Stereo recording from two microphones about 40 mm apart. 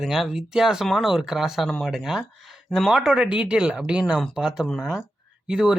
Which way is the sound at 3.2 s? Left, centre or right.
Right.